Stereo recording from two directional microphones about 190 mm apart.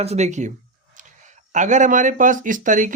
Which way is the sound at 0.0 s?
35° right (ahead or behind).